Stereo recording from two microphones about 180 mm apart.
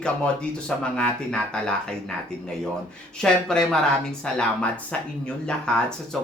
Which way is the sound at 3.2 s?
5° left (ahead or behind).